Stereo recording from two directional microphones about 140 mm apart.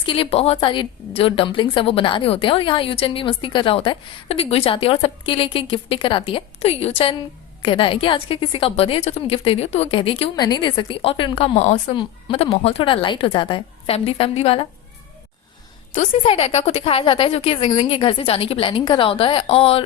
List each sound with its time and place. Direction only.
0.0 s a woman's voice: 40° left (ahead or behind)
16.2 s a woman's voice: 40° left (ahead or behind)